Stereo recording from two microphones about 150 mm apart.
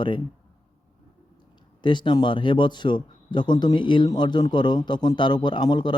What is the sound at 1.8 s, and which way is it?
Speech, 30° left (ahead or behind).